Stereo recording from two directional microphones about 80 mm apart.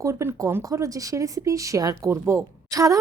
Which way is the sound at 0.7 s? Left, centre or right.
Right.